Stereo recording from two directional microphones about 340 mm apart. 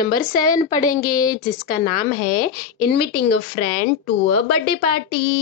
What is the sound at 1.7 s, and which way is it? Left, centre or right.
A woman's voice, left.